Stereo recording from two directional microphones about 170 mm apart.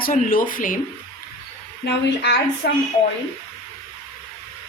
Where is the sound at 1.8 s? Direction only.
80° left.